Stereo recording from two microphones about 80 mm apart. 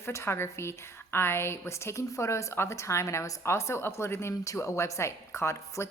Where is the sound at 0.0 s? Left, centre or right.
Left.